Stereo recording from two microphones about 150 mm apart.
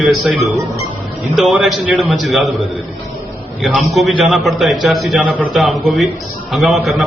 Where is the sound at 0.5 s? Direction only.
20° right (ahead or behind).